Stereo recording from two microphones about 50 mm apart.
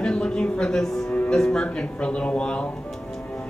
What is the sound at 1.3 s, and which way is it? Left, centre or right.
Speech, centre.